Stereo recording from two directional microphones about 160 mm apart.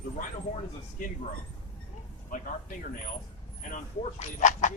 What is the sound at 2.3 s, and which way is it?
Speech, 60° left (ahead or behind).